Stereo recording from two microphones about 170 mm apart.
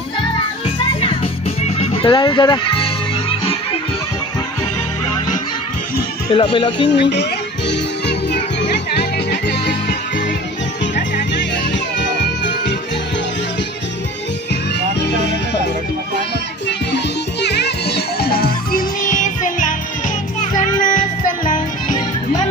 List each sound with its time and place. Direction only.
1.6 s music: 35° left (ahead or behind)
6.3 s speech: 30° left (ahead or behind)
6.9 s music: 90° left
12.2 s music: 90° left
17.4 s music: 80° left; by 21.9 s 50° left (ahead or behind)